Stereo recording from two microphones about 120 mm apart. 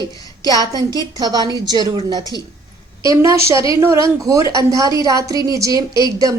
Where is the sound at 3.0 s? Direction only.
25° right (ahead or behind).